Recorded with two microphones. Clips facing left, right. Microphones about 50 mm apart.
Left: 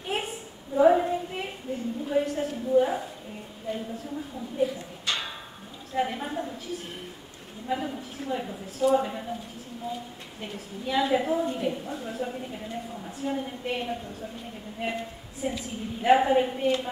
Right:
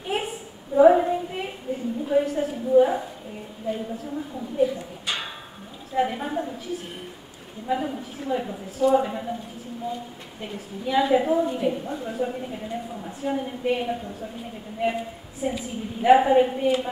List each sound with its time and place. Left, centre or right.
0.1 s a sound: centre
0.7 s child singing: centre
2.0 s a woman's voice: centre
5.0 s a sound: centre
5.9 s a woman's voice: centre
10.4 s a woman's voice: centre